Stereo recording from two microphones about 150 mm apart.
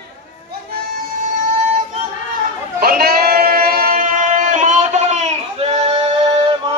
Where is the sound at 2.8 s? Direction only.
85° right; by 6.1 s 40° right (ahead or behind).